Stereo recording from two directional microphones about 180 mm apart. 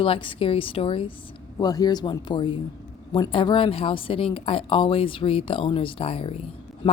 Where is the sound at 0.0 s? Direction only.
30° left (ahead or behind).